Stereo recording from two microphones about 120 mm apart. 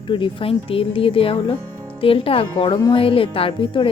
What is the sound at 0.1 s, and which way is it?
Speech, 45° left (ahead or behind).